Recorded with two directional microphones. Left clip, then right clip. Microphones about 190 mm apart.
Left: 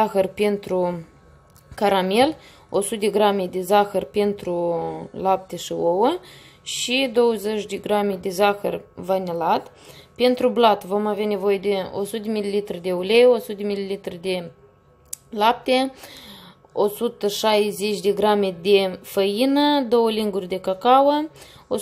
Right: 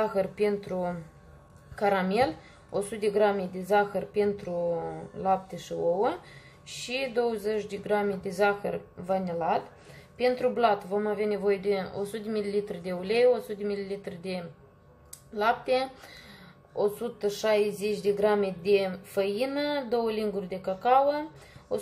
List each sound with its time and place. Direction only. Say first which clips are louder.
0.0 s speech: left 7 dB; 40° left (ahead or behind)